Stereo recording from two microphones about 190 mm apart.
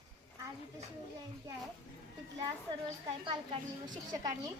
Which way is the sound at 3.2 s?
25° right (ahead or behind).